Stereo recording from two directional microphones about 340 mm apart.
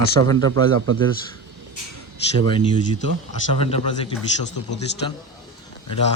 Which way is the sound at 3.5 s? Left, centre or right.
Centre.